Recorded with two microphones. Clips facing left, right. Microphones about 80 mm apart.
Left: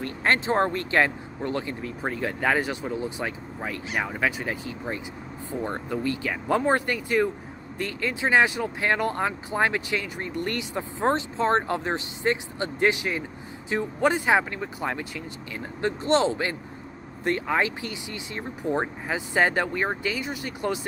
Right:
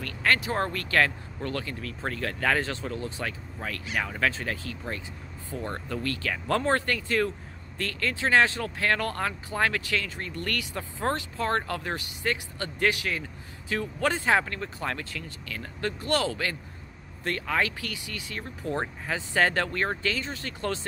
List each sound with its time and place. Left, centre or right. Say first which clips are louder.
0.0 s speech: left 2 dB; left